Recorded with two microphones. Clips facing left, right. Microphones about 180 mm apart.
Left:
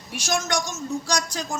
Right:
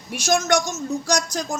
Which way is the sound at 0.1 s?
50° right (ahead or behind).